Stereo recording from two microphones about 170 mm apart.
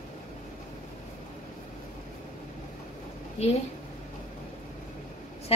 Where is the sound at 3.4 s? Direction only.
40° left (ahead or behind).